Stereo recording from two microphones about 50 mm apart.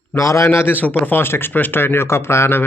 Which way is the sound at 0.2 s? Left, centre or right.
Left.